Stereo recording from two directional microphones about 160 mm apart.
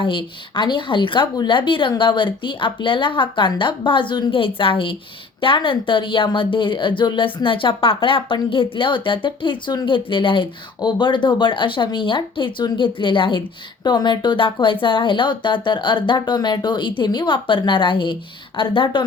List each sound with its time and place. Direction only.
0.0 s speech: 30° left (ahead or behind)